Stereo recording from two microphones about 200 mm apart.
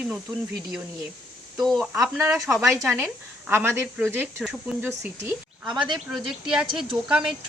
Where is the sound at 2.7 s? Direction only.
10° right (ahead or behind).